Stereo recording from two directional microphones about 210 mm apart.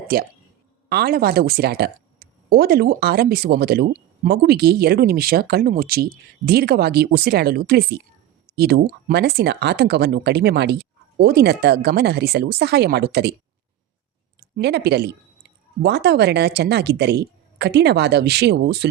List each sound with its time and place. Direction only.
0.1 s speech: 45° right (ahead or behind)
14.5 s speech: 50° right (ahead or behind)